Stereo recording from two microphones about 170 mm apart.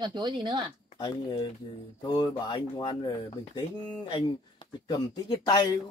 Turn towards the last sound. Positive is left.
turn(degrees=25)  # may be behind; listen again after turning